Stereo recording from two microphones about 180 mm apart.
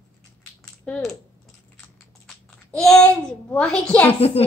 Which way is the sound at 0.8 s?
5° left (ahead or behind).